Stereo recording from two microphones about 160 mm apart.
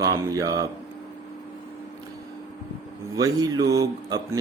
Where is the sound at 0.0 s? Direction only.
20° right (ahead or behind).